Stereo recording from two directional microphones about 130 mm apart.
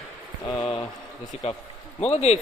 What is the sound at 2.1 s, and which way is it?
Speech, 55° left (ahead or behind).